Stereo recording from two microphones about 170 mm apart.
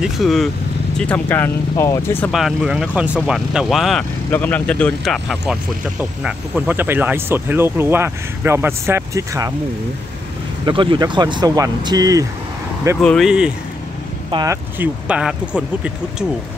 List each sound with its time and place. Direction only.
0.0 s speech: centre (ahead or behind)
2.3 s speech: centre (ahead or behind)
4.3 s speech: 10° left (ahead or behind); by 9.5 s 20° right (ahead or behind)
10.6 s speech: 30° right (ahead or behind)
13.0 s speech: centre (ahead or behind)
14.3 s speech: 20° right (ahead or behind)
15.0 s speech: 5° right (ahead or behind)